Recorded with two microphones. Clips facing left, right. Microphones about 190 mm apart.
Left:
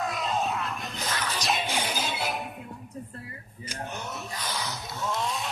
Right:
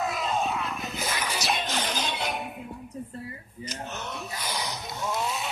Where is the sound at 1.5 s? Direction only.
10° left (ahead or behind).